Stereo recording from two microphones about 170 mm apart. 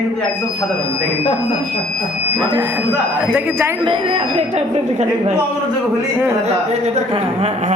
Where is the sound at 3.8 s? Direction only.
30° right (ahead or behind).